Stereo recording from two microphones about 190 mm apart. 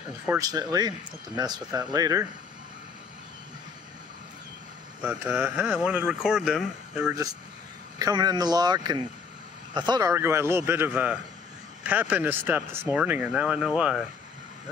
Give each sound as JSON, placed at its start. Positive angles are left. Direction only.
{"t": 0.4, "sound": "speech", "side_deg": -20}
{"t": 5.0, "sound": "speech", "side_deg": -10}
{"t": 8.0, "sound": "speech", "side_deg": -20}